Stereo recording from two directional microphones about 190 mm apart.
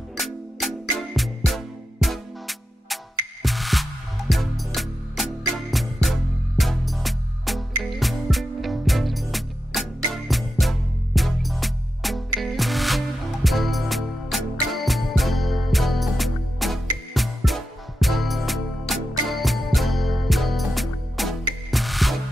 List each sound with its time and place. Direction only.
0.2 s music: centre (ahead or behind)